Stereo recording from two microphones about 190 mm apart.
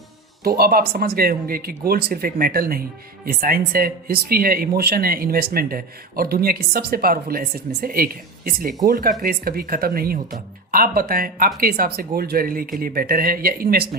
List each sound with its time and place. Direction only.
0.4 s speech: 50° right (ahead or behind)